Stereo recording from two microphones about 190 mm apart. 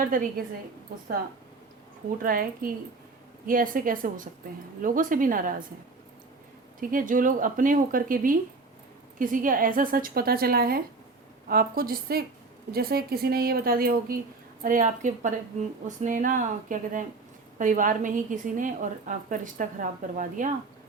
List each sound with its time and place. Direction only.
0.0 s a woman's voice: 45° right (ahead or behind)
2.2 s a woman's voice: 50° right (ahead or behind)
6.7 s a woman's voice: 45° right (ahead or behind)